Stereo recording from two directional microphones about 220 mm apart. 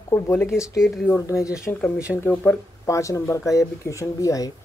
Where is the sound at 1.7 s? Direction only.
Centre (ahead or behind).